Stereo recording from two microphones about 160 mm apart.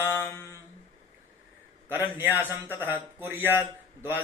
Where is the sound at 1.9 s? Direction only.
15° right (ahead or behind).